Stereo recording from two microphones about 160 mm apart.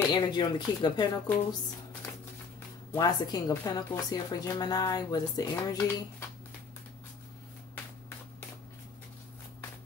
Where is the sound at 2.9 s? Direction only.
25° left (ahead or behind).